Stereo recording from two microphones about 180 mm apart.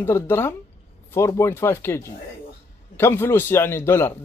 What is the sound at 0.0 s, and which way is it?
A man's voice, 15° left (ahead or behind).